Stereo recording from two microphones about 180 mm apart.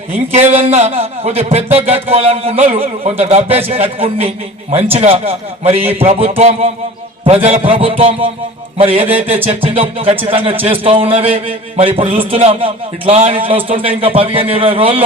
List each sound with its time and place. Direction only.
0.3 s a man's voice: 35° right (ahead or behind)